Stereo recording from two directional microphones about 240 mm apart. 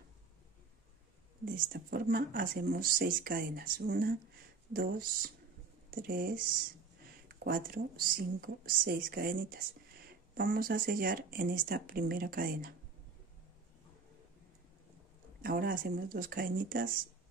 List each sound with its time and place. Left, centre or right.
1.4 s speech: right
15.4 s speech: right